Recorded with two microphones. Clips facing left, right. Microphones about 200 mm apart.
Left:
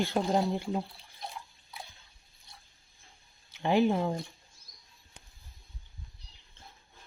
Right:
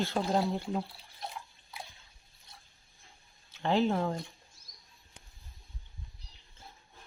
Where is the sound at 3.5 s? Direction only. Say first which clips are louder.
Left 2 dB; 15° left (ahead or behind).